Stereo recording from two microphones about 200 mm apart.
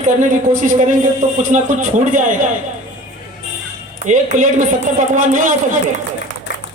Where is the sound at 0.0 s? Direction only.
40° right (ahead or behind).